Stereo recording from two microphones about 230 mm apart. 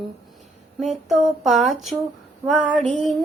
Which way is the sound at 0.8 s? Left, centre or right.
Centre.